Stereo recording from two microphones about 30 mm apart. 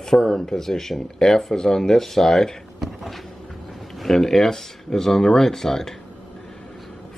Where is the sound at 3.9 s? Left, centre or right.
Centre.